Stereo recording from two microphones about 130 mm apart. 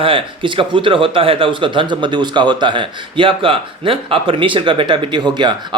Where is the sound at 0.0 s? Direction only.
40° right (ahead or behind).